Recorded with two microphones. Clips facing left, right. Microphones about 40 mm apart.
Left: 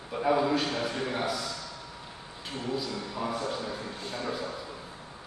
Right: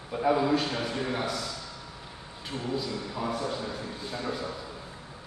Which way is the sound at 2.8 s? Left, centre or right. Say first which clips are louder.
Right 1 dB; centre.